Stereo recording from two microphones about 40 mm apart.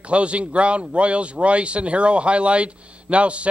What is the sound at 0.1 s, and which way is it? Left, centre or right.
Speech, right.